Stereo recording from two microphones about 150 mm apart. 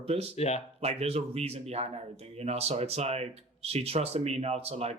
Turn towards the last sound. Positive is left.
turn(degrees=-45)  # may be behind; listen again after turning